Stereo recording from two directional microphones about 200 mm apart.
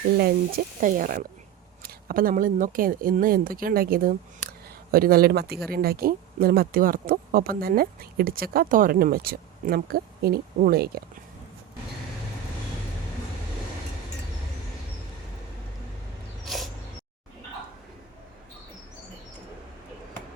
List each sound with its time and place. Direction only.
0.2 s speech: 50° right (ahead or behind)
16.5 s dog: centre (ahead or behind)